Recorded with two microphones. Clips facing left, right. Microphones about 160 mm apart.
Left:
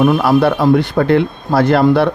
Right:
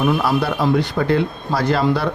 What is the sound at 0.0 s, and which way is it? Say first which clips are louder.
A man's voice: left 7 dB; 60° left (ahead or behind).